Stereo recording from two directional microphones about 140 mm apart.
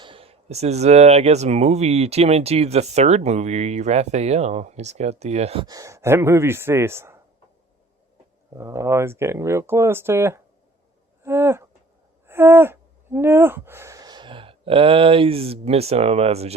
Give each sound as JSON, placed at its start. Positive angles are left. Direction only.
{"t": 0.0, "sound": "speech", "side_deg": -40}
{"t": 5.6, "sound": "speech", "side_deg": -25}
{"t": 8.5, "sound": "speech", "side_deg": -20}
{"t": 11.2, "sound": "a sound", "side_deg": -20}
{"t": 12.3, "sound": "speech", "side_deg": -15}